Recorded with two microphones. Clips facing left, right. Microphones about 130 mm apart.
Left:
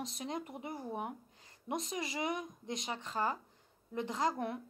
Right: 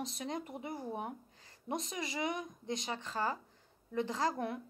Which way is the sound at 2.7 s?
35° right (ahead or behind).